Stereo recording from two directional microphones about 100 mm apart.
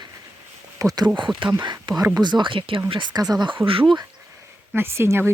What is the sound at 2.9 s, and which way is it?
Speech, 50° right (ahead or behind).